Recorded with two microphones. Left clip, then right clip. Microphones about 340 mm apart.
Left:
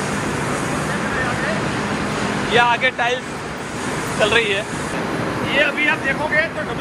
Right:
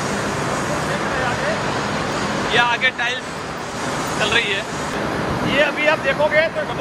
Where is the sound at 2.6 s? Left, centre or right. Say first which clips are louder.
Left 2 dB; centre.